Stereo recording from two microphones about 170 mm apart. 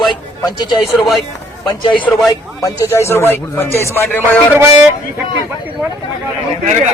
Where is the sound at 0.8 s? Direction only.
Centre (ahead or behind).